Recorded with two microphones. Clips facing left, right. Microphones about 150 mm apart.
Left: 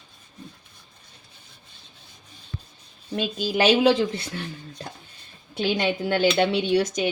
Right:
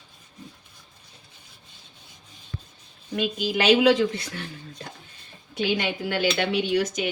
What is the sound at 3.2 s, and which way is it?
Speech, 35° left (ahead or behind).